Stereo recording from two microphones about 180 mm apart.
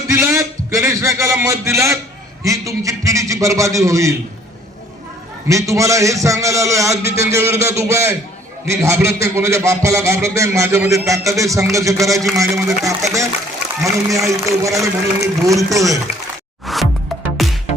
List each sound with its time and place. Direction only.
0.1 s a man's voice: 15° right (ahead or behind)
5.5 s a man's voice: 15° right (ahead or behind)
16.6 s music: centre (ahead or behind)